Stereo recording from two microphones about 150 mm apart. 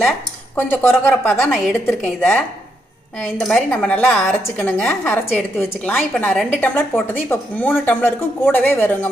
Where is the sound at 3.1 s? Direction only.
5° left (ahead or behind).